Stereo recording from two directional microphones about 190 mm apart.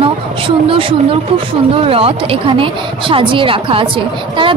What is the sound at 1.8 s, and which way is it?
A woman's voice, 30° right (ahead or behind).